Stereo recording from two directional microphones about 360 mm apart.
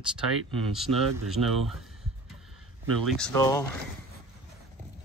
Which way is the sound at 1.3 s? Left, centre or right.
Centre.